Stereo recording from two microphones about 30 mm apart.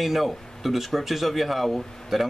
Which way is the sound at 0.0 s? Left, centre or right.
Centre.